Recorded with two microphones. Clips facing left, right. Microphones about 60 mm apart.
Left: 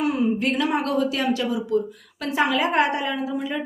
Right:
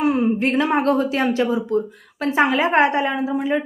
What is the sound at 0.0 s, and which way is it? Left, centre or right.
A woman's voice, right.